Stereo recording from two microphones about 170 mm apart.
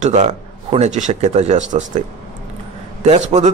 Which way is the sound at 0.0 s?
40° right (ahead or behind).